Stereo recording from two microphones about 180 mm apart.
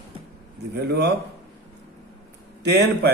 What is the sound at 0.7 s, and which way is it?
Speech, 65° right (ahead or behind).